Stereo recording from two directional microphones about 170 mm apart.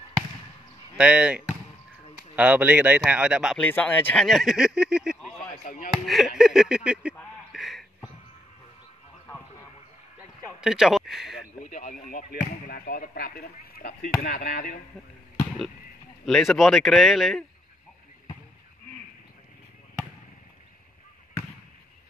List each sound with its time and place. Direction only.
0.9 s speech: 5° right (ahead or behind)
5.5 s speech: 50° left (ahead or behind)
6.0 s speech: centre (ahead or behind)
7.5 s a sound: centre (ahead or behind)
10.6 s a sound: 5° right (ahead or behind)
11.7 s speech: 55° left (ahead or behind)
16.3 s speech: centre (ahead or behind)